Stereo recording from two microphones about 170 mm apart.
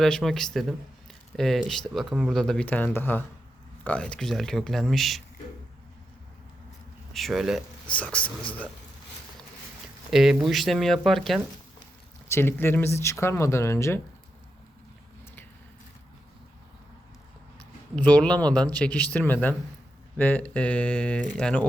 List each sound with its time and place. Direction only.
0.0 s speech: centre (ahead or behind)
7.1 s speech: centre (ahead or behind)
10.1 s speech: centre (ahead or behind)
12.3 s speech: 15° left (ahead or behind)
17.9 s speech: 10° left (ahead or behind)